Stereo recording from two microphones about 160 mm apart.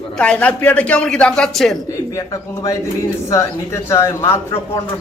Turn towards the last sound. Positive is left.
turn(degrees=15)  # may be behind; listen again after turning